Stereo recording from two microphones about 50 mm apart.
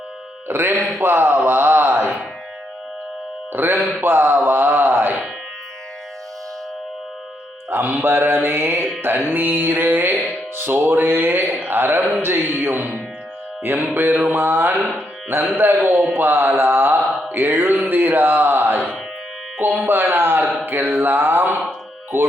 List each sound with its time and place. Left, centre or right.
0.4 s mantra: right
1.5 s a sound: right
3.5 s a sound: right
7.7 s mantra: right
8.4 s music: right
9.3 s music: right
12.2 s mantra: right
19.9 s mantra: right